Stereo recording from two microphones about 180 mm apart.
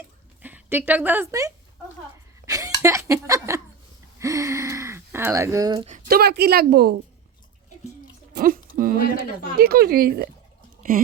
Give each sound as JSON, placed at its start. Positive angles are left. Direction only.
{"t": 0.4, "sound": "a woman's voice", "side_deg": -10}
{"t": 2.5, "sound": "a sound", "side_deg": -20}
{"t": 4.2, "sound": "gasp", "side_deg": -15}
{"t": 6.1, "sound": "a woman's voice", "side_deg": -60}
{"t": 8.3, "sound": "a sound", "side_deg": -55}
{"t": 9.0, "sound": "speech", "side_deg": 60}
{"t": 9.6, "sound": "a woman's voice", "side_deg": -60}